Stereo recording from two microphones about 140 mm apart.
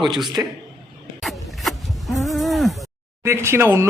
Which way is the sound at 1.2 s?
Centre (ahead or behind).